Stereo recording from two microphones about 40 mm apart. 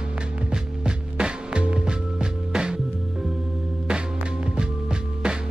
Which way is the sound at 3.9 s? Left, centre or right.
Right.